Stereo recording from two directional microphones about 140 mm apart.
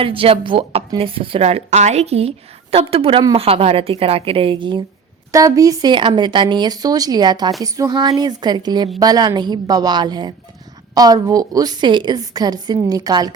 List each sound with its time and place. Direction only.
0.0 s a woman's voice: 40° right (ahead or behind)
5.3 s a woman's voice: 25° right (ahead or behind)